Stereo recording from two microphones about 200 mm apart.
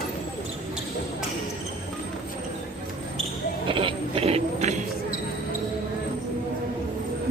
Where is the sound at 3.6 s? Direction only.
25° right (ahead or behind).